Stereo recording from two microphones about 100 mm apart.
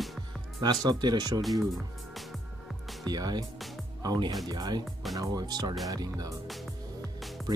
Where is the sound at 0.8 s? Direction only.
40° right (ahead or behind).